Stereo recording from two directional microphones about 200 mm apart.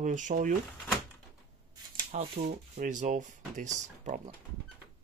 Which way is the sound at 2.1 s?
45° right (ahead or behind).